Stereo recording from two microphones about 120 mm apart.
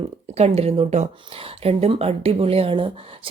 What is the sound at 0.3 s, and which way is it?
Speech, 60° right (ahead or behind).